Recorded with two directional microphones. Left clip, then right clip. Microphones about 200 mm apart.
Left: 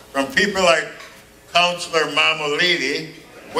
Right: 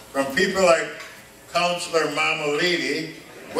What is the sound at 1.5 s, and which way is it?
Speech, 5° left (ahead or behind).